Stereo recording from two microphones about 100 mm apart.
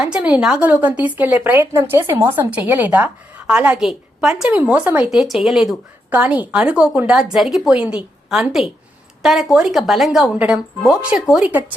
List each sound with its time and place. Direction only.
0.0 s speech: 10° right (ahead or behind)
5.1 s a woman's voice: centre (ahead or behind)
6.1 s a woman's voice: 15° right (ahead or behind)